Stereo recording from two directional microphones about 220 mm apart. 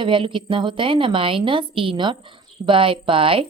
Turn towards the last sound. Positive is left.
turn(degrees=-25)  # may be behind; listen again after turning